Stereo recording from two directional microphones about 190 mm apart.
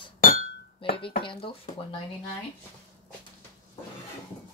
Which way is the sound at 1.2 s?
30° left (ahead or behind).